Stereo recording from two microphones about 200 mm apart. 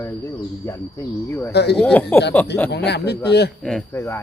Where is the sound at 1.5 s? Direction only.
55° left (ahead or behind).